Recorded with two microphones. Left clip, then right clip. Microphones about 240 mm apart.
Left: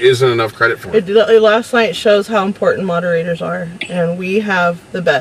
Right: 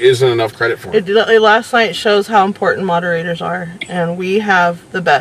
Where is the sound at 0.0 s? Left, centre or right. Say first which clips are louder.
Even; centre.